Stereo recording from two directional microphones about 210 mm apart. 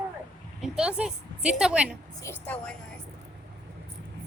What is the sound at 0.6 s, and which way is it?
A woman's voice, 5° right (ahead or behind).